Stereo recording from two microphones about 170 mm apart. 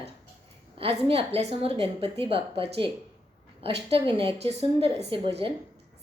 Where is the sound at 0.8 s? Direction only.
35° right (ahead or behind).